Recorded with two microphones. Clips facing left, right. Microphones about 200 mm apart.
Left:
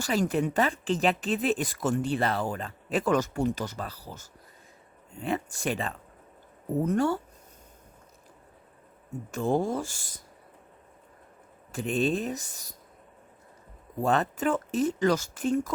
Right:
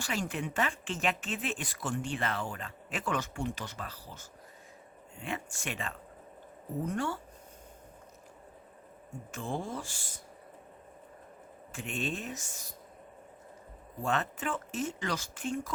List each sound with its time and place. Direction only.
0.0 s speech: 40° left (ahead or behind)
9.3 s speech: 40° left (ahead or behind)
11.7 s speech: 35° left (ahead or behind)
14.0 s speech: 35° left (ahead or behind)